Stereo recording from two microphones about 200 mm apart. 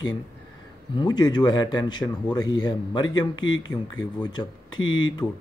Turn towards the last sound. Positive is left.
turn(degrees=80)